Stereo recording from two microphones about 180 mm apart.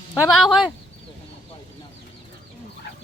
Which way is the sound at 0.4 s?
Centre (ahead or behind).